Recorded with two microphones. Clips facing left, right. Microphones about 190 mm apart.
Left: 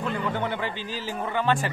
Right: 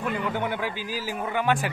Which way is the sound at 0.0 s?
10° right (ahead or behind).